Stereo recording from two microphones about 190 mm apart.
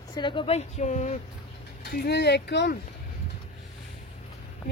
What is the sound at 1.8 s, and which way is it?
Speech, 60° left (ahead or behind).